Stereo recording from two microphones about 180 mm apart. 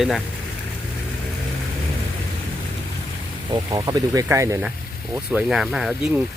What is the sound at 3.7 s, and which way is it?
Speech, 20° right (ahead or behind).